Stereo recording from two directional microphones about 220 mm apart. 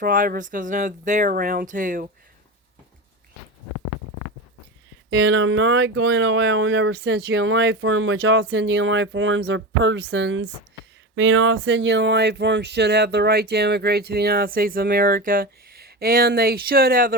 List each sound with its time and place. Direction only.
0.0 s speech: 40° right (ahead or behind)
5.1 s speech: 55° right (ahead or behind); by 17.2 s 40° right (ahead or behind)